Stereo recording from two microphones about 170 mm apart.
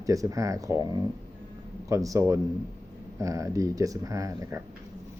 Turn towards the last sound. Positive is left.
turn(degrees=-15)  # may be behind; listen again after turning